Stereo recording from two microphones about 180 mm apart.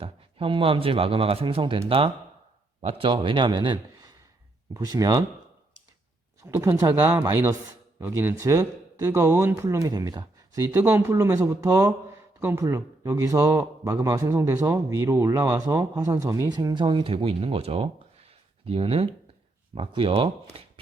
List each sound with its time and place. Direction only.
0.0 s a man's voice: 30° right (ahead or behind)
6.4 s a man's voice: 15° right (ahead or behind)
20.5 s shuffling cards: 30° right (ahead or behind)